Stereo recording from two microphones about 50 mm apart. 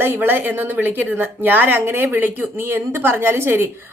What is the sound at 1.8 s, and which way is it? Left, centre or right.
Speech, right.